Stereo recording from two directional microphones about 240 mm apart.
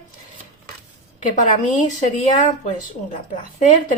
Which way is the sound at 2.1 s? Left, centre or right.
Left.